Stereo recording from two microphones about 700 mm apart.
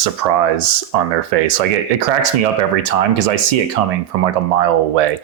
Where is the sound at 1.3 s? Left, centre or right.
Right.